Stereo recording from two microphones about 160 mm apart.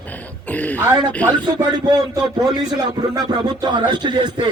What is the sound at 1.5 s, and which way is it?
A man's voice, 25° right (ahead or behind).